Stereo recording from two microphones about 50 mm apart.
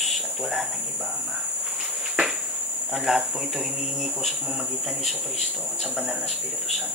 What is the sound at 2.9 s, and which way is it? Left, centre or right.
Speech, centre.